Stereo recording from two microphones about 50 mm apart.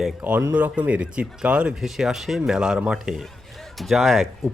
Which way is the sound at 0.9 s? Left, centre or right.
Right.